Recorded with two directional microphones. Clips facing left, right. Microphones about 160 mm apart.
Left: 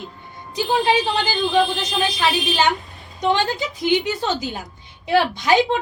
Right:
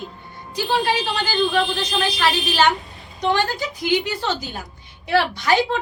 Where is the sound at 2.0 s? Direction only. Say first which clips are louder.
Left 1 dB; 20° left (ahead or behind).